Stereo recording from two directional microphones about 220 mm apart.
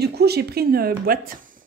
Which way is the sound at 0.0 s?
45° right (ahead or behind).